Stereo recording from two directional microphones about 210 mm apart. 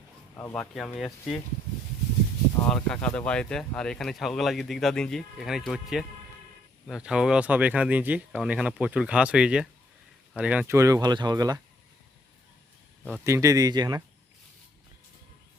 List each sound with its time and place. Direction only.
0.3 s speech: 10° left (ahead or behind)
2.6 s speech: 5° left (ahead or behind); by 11.6 s 15° right (ahead or behind)
13.2 s speech: 15° right (ahead or behind)